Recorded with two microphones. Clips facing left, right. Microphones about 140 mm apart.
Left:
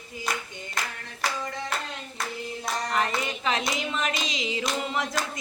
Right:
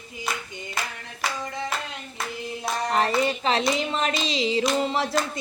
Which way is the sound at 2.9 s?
30° right (ahead or behind).